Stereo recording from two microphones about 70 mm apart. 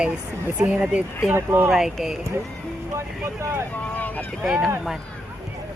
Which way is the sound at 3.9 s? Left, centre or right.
Left.